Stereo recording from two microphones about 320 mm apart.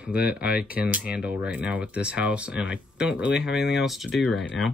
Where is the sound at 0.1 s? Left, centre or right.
Left.